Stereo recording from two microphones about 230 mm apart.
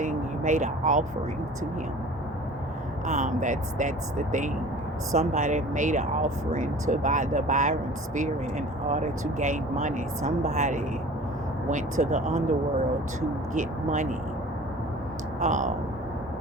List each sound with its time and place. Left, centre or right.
0.0 s vehicle: right
3.1 s speech: right
13.5 s speech: right
15.4 s speech: right